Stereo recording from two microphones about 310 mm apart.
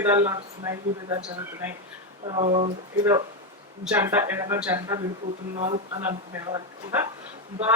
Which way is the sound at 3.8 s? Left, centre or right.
Centre.